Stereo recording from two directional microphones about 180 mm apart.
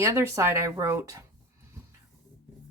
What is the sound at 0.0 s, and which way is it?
Speech, 15° right (ahead or behind).